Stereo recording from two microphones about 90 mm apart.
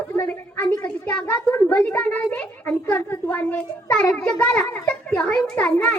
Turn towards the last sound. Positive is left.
turn(degrees=15)  # may be behind; listen again after turning